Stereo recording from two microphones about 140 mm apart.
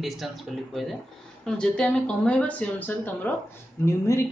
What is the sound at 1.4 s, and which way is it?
Speech, 5° left (ahead or behind).